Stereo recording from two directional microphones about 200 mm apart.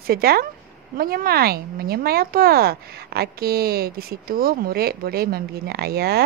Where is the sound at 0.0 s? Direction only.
50° right (ahead or behind).